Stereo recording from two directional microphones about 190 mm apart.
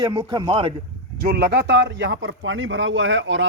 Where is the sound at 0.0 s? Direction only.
20° right (ahead or behind).